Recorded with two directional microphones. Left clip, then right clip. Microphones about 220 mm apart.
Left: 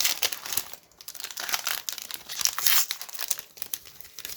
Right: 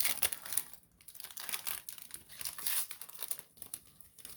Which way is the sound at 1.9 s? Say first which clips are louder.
Left 17 dB; 30° left (ahead or behind).